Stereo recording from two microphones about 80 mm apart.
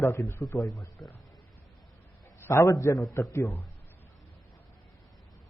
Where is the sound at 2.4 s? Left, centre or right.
Left.